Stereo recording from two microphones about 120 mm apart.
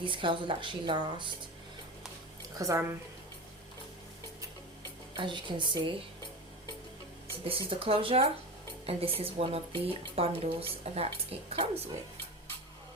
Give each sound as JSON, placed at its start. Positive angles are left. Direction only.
{"t": 0.0, "sound": "a woman's voice", "side_deg": -45}
{"t": 2.6, "sound": "a woman's voice", "side_deg": -25}
{"t": 5.1, "sound": "a woman's voice", "side_deg": -40}
{"t": 7.4, "sound": "a woman's voice", "side_deg": -50}